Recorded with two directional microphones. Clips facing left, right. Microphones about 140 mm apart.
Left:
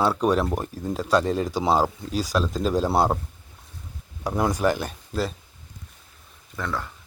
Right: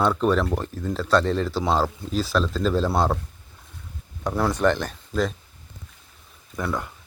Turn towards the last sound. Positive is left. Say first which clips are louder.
# right 2 dB
turn(degrees=-15)  # may be behind; listen again after turning